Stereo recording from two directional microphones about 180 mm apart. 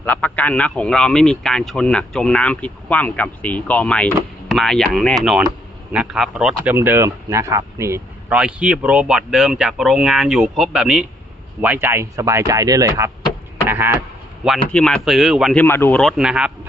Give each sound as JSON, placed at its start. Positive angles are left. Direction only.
{"t": 0.0, "sound": "speech", "side_deg": 10}
{"t": 6.7, "sound": "speech", "side_deg": -15}
{"t": 13.7, "sound": "a sound", "side_deg": -10}
{"t": 14.4, "sound": "speech", "side_deg": 0}
{"t": 15.6, "sound": "speech", "side_deg": 10}